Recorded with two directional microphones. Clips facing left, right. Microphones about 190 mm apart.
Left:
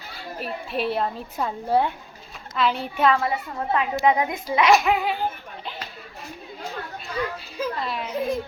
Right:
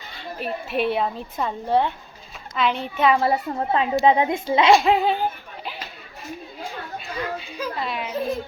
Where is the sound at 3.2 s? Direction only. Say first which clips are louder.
Right 5 dB; 30° right (ahead or behind).